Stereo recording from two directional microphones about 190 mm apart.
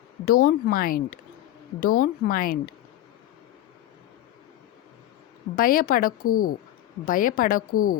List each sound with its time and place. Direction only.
0.3 s a woman's voice: 50° left (ahead or behind)
5.5 s a woman's voice: 50° left (ahead or behind)